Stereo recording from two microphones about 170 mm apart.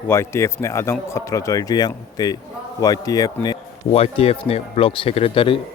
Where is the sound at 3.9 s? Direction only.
35° left (ahead or behind).